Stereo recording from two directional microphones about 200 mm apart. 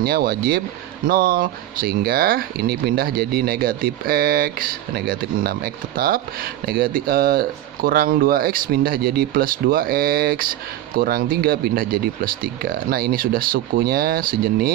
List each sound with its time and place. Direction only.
0.0 s speech: 50° right (ahead or behind)